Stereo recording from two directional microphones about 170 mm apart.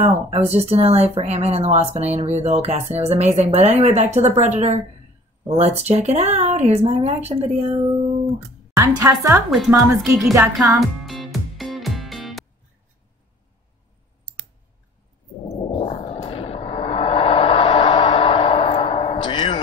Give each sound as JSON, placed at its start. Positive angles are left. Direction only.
{"t": 0.0, "sound": "speech", "side_deg": -40}
{"t": 8.4, "sound": "speech", "side_deg": -15}
{"t": 9.7, "sound": "speech", "side_deg": -5}
{"t": 10.8, "sound": "music", "side_deg": 0}
{"t": 15.4, "sound": "a sound", "side_deg": 35}